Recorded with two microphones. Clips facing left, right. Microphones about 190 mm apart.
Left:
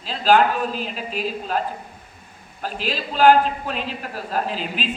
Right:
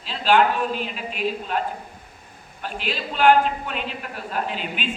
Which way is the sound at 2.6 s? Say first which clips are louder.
Left 2 dB; 35° left (ahead or behind).